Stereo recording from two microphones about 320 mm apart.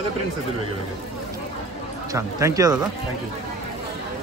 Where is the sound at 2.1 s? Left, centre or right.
Centre.